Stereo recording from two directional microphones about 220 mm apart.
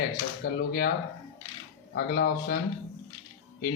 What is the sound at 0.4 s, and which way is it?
Speech, 45° left (ahead or behind).